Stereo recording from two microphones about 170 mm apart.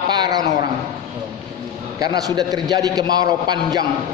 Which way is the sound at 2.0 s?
25° right (ahead or behind).